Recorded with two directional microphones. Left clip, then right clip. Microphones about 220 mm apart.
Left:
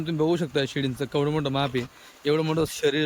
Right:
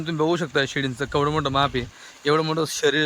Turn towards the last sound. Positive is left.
turn(degrees=10)  # may be behind; listen again after turning